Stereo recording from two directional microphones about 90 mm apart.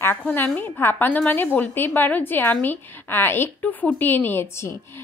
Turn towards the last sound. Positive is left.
turn(degrees=30)  # may be behind; listen again after turning